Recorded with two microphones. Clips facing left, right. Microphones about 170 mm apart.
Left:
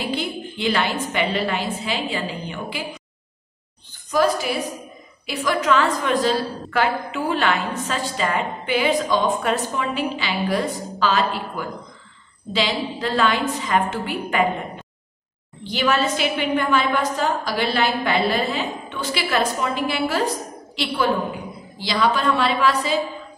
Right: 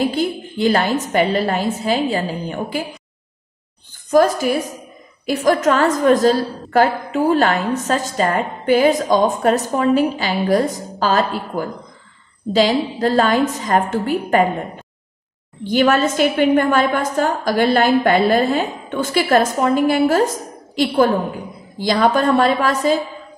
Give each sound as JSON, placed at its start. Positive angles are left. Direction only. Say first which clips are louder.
{"t": 0.0, "sound": "a woman's voice", "louder": "right 7 dB", "side_deg": -45}
{"t": 4.1, "sound": "a woman's voice", "louder": "right 6 dB", "side_deg": -45}
{"t": 15.6, "sound": "a woman's voice", "louder": "right 6 dB", "side_deg": -50}